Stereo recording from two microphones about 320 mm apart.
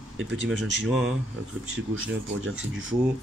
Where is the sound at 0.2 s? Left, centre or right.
Right.